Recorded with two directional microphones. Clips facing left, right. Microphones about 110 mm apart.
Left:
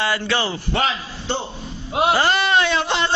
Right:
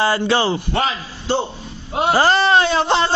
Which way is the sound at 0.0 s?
30° right (ahead or behind).